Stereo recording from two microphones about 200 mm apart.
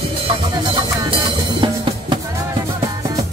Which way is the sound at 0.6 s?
25° right (ahead or behind).